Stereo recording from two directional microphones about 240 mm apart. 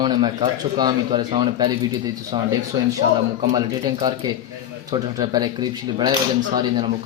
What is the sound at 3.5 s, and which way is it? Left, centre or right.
A man's voice, centre.